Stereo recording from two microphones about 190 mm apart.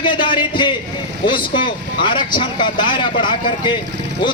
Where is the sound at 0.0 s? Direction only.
25° left (ahead or behind).